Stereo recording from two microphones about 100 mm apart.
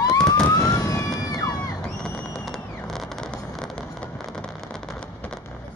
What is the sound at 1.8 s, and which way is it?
Fireworks, 5° left (ahead or behind).